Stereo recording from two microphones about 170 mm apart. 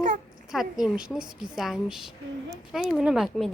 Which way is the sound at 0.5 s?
Centre (ahead or behind).